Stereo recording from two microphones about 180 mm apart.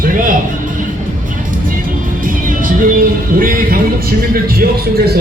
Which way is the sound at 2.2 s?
50° right (ahead or behind).